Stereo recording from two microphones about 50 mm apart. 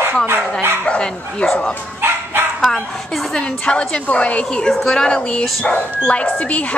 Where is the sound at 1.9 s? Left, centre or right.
Right.